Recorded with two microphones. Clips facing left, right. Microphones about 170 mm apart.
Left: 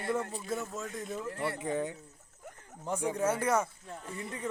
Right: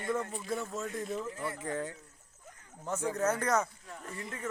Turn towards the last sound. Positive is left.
turn(degrees=15)  # may be behind; listen again after turning